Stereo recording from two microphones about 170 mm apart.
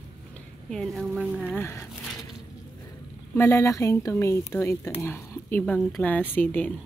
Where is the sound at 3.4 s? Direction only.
15° left (ahead or behind).